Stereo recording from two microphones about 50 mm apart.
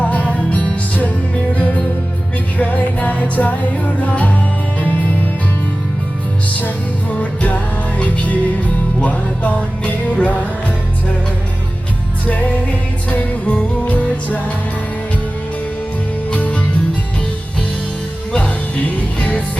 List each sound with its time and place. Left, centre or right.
0.0 s music: left
7.1 s music: left
12.2 s music: left
16.3 s music: left
18.3 s music: left